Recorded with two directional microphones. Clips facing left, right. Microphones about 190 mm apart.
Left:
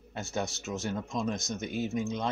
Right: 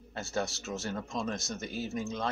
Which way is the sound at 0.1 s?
20° left (ahead or behind).